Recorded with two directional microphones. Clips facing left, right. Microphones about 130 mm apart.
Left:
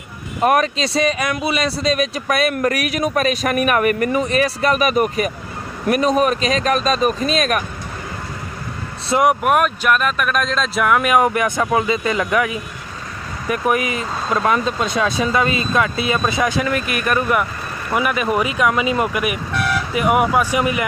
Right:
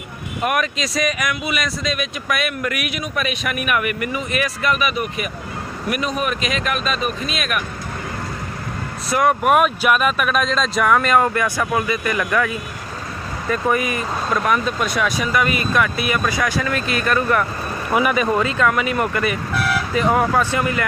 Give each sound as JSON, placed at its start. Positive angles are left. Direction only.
{"t": 0.4, "sound": "speech", "side_deg": 35}
{"t": 9.0, "sound": "speech", "side_deg": 20}
{"t": 9.4, "sound": "speech", "side_deg": 0}
{"t": 16.8, "sound": "speech", "side_deg": -30}
{"t": 17.1, "sound": "speech", "side_deg": 15}
{"t": 17.9, "sound": "speech", "side_deg": 0}
{"t": 18.3, "sound": "speech", "side_deg": 15}
{"t": 19.5, "sound": "vehicle", "side_deg": -5}
{"t": 19.9, "sound": "speech", "side_deg": 10}